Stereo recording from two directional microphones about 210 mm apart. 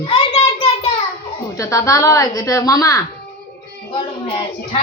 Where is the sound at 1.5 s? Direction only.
15° left (ahead or behind).